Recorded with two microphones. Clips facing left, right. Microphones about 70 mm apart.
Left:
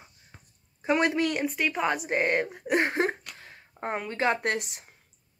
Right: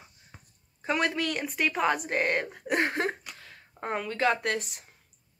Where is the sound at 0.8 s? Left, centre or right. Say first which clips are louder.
Left 4 dB; centre.